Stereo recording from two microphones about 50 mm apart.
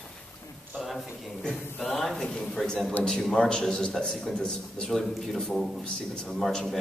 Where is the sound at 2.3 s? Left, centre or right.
Centre.